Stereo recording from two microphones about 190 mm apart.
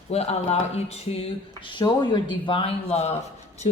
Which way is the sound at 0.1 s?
35° left (ahead or behind).